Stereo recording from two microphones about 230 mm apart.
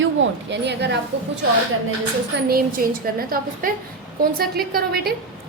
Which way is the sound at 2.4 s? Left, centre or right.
Right.